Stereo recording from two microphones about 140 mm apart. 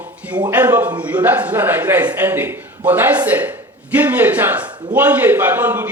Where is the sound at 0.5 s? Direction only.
15° right (ahead or behind).